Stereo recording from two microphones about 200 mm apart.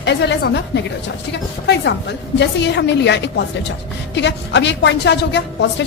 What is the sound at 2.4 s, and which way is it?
A woman's voice, 60° left (ahead or behind).